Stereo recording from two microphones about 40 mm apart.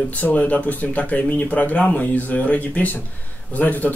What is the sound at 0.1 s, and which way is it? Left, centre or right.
A man's voice, left.